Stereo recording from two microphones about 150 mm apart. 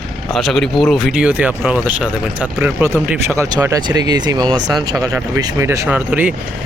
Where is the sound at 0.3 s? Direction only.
Centre (ahead or behind).